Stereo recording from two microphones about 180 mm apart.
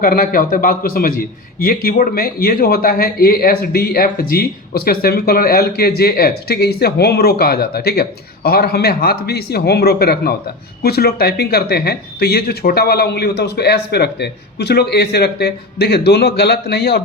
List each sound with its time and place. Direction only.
0.0 s a man's voice: 50° left (ahead or behind)